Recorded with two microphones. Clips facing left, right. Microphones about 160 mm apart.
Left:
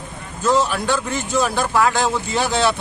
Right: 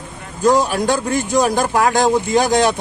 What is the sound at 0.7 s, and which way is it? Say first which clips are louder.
Speech: right 4 dB; 40° right (ahead or behind).